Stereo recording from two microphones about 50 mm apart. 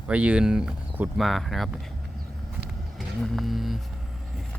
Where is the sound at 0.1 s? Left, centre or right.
Right.